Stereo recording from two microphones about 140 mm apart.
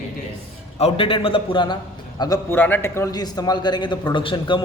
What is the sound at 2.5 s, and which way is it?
A man's voice, 15° left (ahead or behind).